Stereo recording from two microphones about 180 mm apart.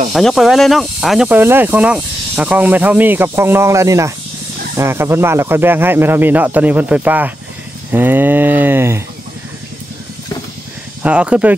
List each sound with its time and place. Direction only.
0.1 s speech: centre (ahead or behind)
11.0 s speech: 5° right (ahead or behind)